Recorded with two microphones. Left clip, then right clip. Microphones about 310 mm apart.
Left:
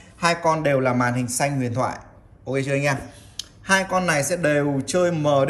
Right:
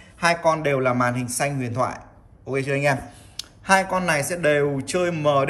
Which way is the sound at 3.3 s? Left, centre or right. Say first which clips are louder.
Right 2 dB; centre.